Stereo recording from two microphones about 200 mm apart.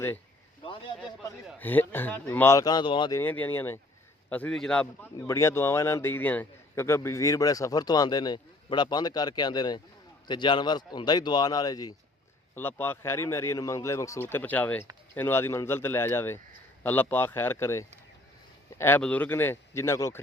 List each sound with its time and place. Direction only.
0.6 s speech: 25° left (ahead or behind)
1.5 s a man's voice: 10° left (ahead or behind)